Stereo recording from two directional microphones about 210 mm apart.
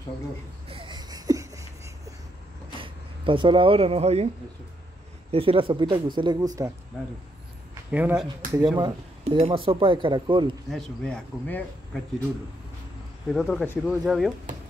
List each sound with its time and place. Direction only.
0.7 s a sound: 25° right (ahead or behind)
2.8 s speech: 25° right (ahead or behind)
5.3 s speech: 25° right (ahead or behind)
7.9 s speech: 10° right (ahead or behind)
8.5 s speech: 20° right (ahead or behind)
10.7 s speech: 5° left (ahead or behind)
13.3 s speech: centre (ahead or behind)